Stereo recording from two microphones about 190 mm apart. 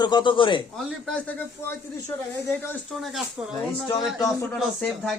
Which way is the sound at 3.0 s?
Centre (ahead or behind).